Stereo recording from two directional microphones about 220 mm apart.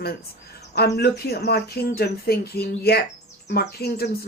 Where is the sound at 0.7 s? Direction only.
45° left (ahead or behind).